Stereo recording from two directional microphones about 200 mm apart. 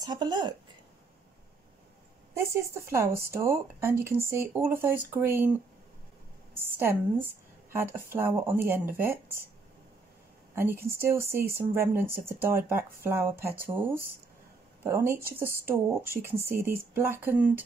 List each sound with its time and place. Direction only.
0.0 s a woman's voice: 20° right (ahead or behind)
2.3 s speech: 15° right (ahead or behind)
10.5 s a woman's voice: 10° right (ahead or behind)